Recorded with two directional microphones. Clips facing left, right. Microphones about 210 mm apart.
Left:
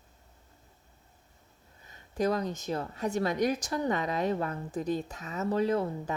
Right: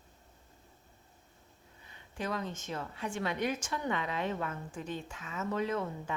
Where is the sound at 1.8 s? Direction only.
40° left (ahead or behind).